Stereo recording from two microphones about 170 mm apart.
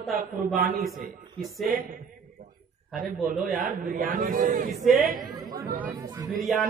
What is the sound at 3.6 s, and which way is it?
Speech, 55° right (ahead or behind).